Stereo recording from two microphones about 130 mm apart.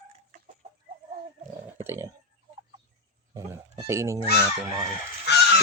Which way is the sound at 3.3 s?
25° right (ahead or behind).